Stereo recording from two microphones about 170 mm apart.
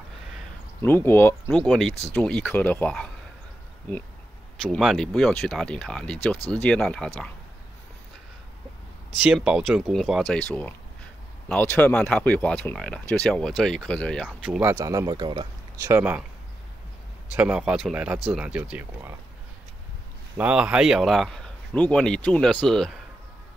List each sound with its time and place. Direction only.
0.8 s speech: 15° left (ahead or behind)
1.5 s speech: centre (ahead or behind)
4.6 s speech: centre (ahead or behind)
9.2 s speech: 5° right (ahead or behind)
14.6 s speech: 20° right (ahead or behind)
15.8 s speech: 10° right (ahead or behind)
17.4 s speech: 5° right (ahead or behind)
20.3 s speech: 5° right (ahead or behind)